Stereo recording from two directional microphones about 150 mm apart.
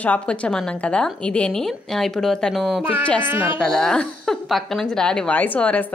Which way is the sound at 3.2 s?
10° right (ahead or behind).